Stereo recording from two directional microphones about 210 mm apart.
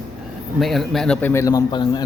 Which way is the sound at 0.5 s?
Centre (ahead or behind).